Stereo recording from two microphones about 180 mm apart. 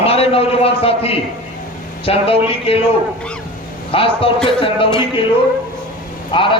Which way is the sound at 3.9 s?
30° left (ahead or behind).